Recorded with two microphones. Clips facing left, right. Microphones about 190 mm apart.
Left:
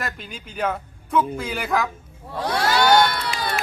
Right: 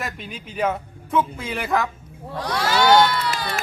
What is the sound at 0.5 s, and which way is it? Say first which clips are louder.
Speech: right 2 dB; centre (ahead or behind).